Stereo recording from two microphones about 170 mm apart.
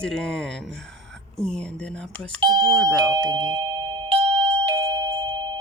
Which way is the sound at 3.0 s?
25° right (ahead or behind).